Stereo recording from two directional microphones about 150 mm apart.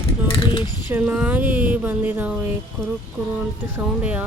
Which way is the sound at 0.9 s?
10° right (ahead or behind).